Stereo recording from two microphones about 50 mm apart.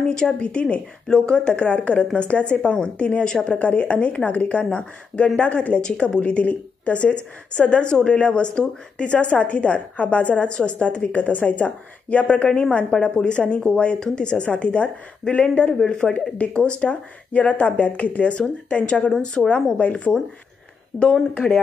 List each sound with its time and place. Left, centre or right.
0.0 s a woman's voice: centre